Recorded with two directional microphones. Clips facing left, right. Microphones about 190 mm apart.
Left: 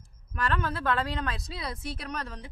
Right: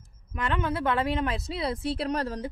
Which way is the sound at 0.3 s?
20° right (ahead or behind).